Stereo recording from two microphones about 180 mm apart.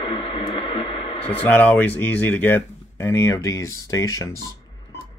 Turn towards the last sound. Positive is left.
turn(degrees=20)  # may be behind; listen again after turning